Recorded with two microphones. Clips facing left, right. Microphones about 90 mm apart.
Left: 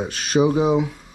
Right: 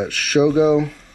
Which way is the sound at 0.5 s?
15° left (ahead or behind).